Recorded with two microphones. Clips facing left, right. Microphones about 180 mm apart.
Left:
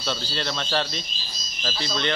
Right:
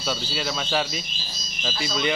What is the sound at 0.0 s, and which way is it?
Speech, 5° right (ahead or behind).